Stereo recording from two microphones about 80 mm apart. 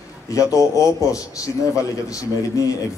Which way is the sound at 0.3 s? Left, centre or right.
Left.